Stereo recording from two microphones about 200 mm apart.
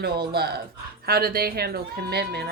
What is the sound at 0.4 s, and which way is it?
A woman's voice, 50° right (ahead or behind).